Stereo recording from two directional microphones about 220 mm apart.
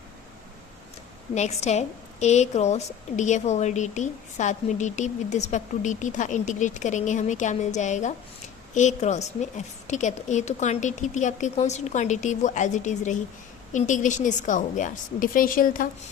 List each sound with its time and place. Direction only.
1.3 s a woman's voice: 30° left (ahead or behind)